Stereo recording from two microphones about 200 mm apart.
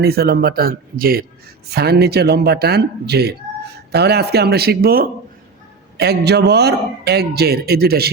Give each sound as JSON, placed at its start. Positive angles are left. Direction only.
{"t": 0.0, "sound": "a man's voice", "side_deg": -50}